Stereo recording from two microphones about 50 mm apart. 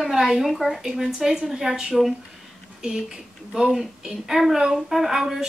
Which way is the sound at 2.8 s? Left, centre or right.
Centre.